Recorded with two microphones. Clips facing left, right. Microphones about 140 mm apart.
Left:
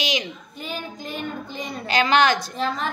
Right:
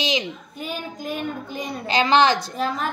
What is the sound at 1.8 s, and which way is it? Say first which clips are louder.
Speech: right 1 dB; 25° right (ahead or behind).